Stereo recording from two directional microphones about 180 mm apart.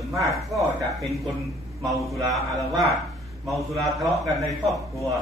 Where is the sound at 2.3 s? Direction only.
Centre (ahead or behind).